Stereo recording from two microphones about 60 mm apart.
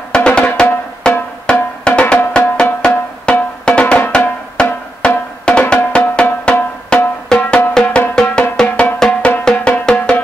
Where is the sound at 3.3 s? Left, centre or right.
Centre.